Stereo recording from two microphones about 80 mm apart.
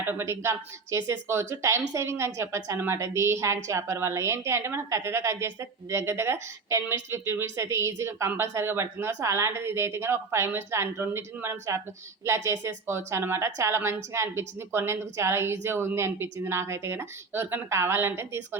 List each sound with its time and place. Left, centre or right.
0.0 s speech: right